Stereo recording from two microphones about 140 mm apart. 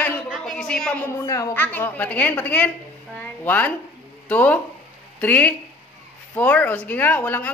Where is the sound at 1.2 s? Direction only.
25° left (ahead or behind).